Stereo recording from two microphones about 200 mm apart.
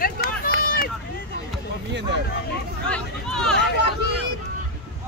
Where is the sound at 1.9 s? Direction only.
60° right (ahead or behind).